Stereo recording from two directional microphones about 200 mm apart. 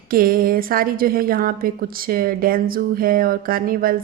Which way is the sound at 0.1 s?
45° right (ahead or behind).